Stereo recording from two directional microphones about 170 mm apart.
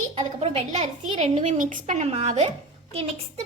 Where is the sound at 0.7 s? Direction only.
40° right (ahead or behind).